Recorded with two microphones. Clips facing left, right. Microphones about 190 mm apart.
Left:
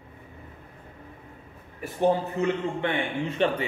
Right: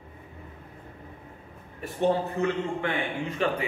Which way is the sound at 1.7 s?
15° left (ahead or behind).